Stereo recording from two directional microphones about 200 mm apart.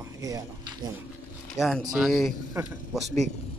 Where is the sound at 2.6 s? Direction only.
15° right (ahead or behind).